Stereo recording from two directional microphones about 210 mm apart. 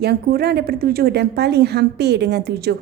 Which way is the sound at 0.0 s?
50° right (ahead or behind).